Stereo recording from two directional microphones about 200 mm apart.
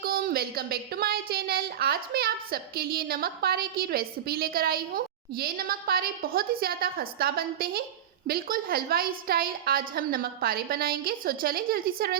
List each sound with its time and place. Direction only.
0.0 s speech: 50° right (ahead or behind)